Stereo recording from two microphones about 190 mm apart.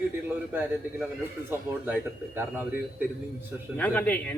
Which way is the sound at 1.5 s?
10° right (ahead or behind).